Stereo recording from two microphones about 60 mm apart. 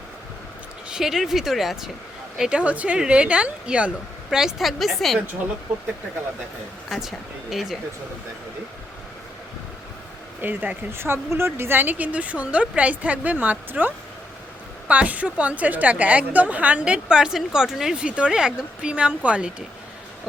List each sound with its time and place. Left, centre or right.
0.9 s speech: centre
2.4 s speech: centre
4.4 s speech: centre
6.9 s speech: centre
10.4 s a woman's voice: right
10.9 s a woman's voice: right; by 18.0 s centre
18.0 s speech: centre